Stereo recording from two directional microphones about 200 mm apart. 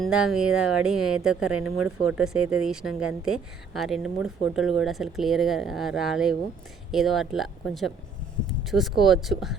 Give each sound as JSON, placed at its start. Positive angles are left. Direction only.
{"t": 0.0, "sound": "speech", "side_deg": 0}